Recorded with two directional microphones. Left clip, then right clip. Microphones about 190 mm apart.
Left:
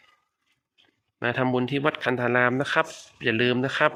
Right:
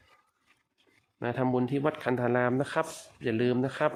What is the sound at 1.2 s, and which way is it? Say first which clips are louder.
Speech: left 5 dB; 5° right (ahead or behind).